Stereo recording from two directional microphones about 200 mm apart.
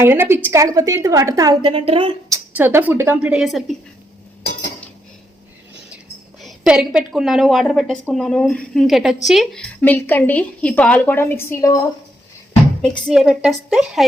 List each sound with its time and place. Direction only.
0.0 s a woman's voice: 10° right (ahead or behind)
2.6 s a woman's voice: 10° right (ahead or behind)
6.4 s a woman's voice: 5° right (ahead or behind); by 11.8 s 15° left (ahead or behind)
12.8 s a woman's voice: centre (ahead or behind)